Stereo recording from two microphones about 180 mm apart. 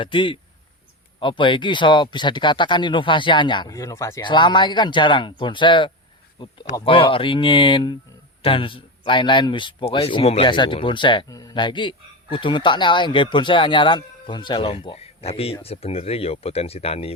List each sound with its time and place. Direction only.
0.0 s a man's voice: 30° left (ahead or behind)